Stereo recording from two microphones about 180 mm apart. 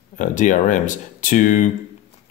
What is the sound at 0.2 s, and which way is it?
Speech, 45° left (ahead or behind).